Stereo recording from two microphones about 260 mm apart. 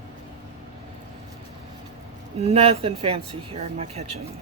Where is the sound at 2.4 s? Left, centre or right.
Right.